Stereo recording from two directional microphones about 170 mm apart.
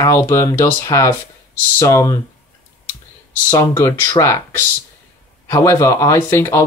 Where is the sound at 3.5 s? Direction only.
15° left (ahead or behind).